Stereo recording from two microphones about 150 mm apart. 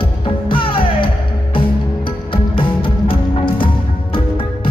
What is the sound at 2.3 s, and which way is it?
Music, 35° left (ahead or behind).